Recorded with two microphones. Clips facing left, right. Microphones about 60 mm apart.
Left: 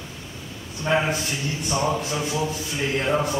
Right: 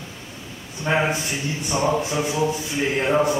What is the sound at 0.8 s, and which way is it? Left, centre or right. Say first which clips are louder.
A man's voice: right 1 dB; centre.